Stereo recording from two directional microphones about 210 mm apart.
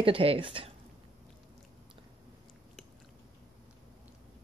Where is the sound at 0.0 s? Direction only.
25° right (ahead or behind).